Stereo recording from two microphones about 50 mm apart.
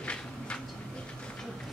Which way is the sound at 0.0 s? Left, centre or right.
Left.